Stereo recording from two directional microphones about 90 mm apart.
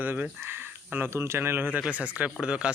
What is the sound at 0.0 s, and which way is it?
Speech, 20° right (ahead or behind).